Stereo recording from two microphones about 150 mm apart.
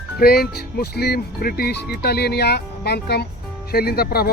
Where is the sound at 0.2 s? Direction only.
90° left.